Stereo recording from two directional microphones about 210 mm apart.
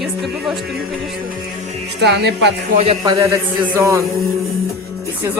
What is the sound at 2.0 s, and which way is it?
Speech, 55° right (ahead or behind).